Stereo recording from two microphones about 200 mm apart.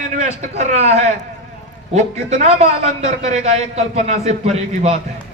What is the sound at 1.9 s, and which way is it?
A man's voice, 35° right (ahead or behind).